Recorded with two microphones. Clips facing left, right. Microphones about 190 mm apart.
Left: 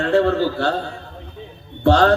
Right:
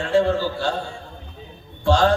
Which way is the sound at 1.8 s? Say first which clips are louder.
Left 3 dB; 60° left (ahead or behind).